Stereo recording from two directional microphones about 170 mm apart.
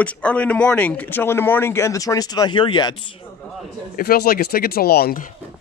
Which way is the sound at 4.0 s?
65° left (ahead or behind).